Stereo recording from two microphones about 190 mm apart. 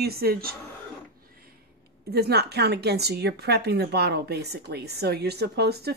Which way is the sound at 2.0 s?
55° right (ahead or behind).